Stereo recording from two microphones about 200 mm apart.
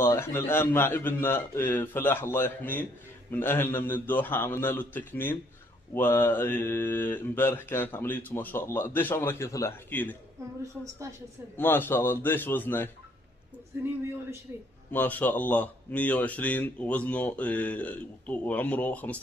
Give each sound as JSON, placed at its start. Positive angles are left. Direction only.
{"t": 0.0, "sound": "a man's voice", "side_deg": 10}
{"t": 10.6, "sound": "a woman's voice", "side_deg": -15}
{"t": 11.5, "sound": "a man's voice", "side_deg": 10}
{"t": 14.9, "sound": "a man's voice", "side_deg": 10}